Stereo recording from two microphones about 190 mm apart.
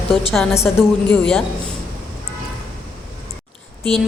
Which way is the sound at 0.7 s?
5° left (ahead or behind).